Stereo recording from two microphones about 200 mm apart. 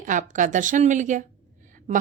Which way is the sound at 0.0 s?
40° right (ahead or behind).